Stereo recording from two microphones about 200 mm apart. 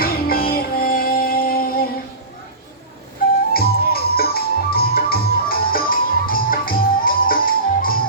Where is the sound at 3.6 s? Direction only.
50° left (ahead or behind).